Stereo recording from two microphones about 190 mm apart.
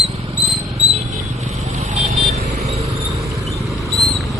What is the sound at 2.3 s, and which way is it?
Vehicle, 35° right (ahead or behind).